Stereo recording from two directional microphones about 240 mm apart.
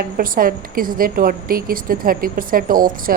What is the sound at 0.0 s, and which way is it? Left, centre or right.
A woman's voice, right.